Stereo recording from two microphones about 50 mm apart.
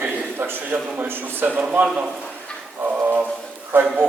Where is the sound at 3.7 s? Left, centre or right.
Right.